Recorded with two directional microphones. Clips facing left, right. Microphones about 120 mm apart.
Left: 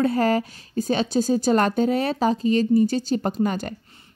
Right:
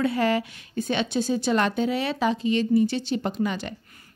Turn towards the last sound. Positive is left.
turn(degrees=45)  # may be behind; listen again after turning